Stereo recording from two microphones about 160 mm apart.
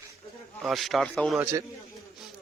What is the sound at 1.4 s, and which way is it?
Speech, 15° right (ahead or behind).